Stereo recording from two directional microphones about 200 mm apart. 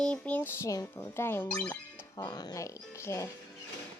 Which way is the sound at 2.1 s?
20° left (ahead or behind).